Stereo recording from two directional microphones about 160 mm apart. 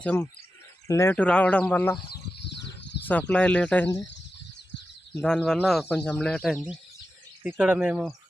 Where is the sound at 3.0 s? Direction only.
10° left (ahead or behind).